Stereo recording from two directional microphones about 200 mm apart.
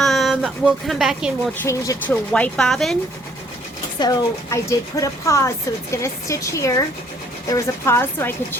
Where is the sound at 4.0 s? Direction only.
15° left (ahead or behind).